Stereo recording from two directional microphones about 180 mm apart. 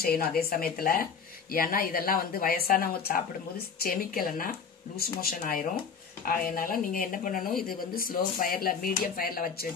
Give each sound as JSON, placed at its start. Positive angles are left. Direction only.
{"t": 0.0, "sound": "speech", "side_deg": 60}